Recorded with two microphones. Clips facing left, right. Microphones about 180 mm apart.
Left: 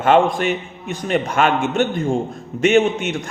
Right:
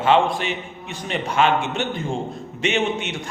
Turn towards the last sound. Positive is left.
turn(degrees=45)  # may be behind; listen again after turning